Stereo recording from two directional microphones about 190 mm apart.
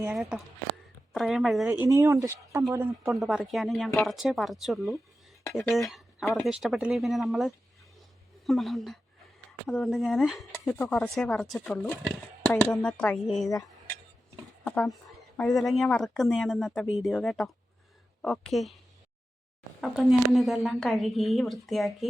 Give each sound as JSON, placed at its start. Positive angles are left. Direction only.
{"t": 0.0, "sound": "speech", "side_deg": -5}
{"t": 1.6, "sound": "speech", "side_deg": -15}
{"t": 15.8, "sound": "speech", "side_deg": 5}
{"t": 19.8, "sound": "speech", "side_deg": 0}